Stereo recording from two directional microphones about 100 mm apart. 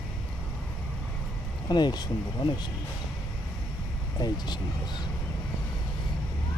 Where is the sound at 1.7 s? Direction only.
45° left (ahead or behind).